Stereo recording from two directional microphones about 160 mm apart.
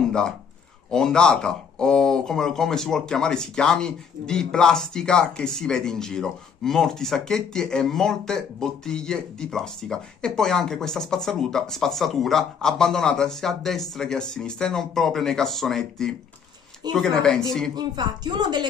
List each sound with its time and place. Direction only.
0.8 s a man's voice: 5° left (ahead or behind)
17.7 s speech: 25° right (ahead or behind)